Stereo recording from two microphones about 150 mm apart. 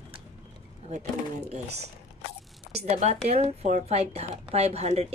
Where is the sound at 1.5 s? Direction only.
45° right (ahead or behind).